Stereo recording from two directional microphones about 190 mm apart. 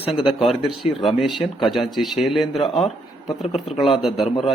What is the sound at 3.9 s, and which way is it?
Speech, centre (ahead or behind).